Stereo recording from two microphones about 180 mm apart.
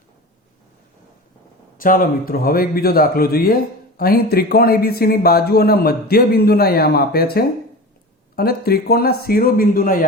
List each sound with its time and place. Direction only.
1.8 s a man's voice: 50° left (ahead or behind)